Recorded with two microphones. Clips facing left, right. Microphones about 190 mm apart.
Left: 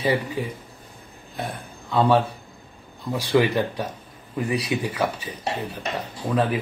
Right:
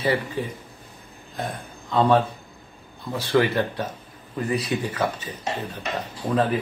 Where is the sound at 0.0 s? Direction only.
15° left (ahead or behind).